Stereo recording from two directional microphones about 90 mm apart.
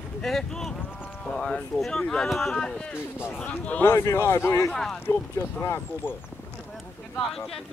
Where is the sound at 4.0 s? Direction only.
30° left (ahead or behind).